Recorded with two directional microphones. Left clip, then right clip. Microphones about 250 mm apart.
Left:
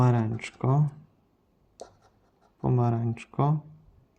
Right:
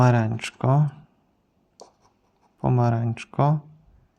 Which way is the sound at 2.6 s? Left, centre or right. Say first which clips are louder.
Right 4 dB; centre.